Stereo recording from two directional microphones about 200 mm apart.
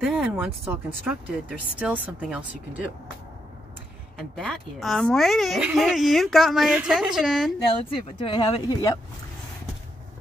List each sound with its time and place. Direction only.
0.0 s speech: centre (ahead or behind)
4.4 s speech: centre (ahead or behind)
8.2 s speech: 25° left (ahead or behind)